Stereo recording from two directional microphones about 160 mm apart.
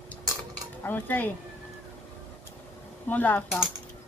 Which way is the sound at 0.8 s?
10° left (ahead or behind).